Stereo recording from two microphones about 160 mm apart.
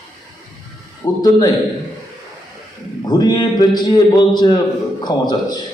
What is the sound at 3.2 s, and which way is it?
A man's voice, 25° left (ahead or behind).